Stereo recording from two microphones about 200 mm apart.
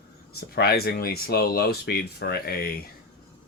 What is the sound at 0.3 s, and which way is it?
Speech, 50° left (ahead or behind).